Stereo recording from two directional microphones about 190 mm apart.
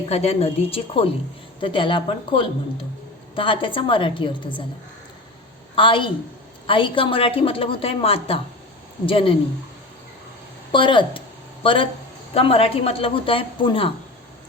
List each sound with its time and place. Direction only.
0.1 s a woman's voice: 30° left (ahead or behind)
5.7 s a woman's voice: 25° left (ahead or behind)
10.7 s a woman's voice: 25° left (ahead or behind)